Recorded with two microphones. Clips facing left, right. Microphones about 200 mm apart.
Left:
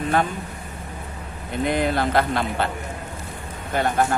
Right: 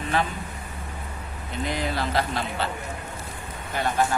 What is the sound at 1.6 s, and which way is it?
Speech, 55° left (ahead or behind).